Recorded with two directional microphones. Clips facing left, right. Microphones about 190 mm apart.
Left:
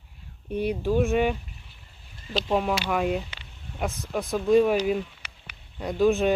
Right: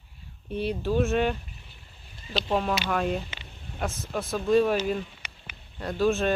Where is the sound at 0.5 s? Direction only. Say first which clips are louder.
Left 2 dB; 15° left (ahead or behind).